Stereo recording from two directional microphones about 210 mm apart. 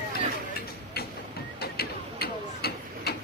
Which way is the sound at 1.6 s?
50° left (ahead or behind).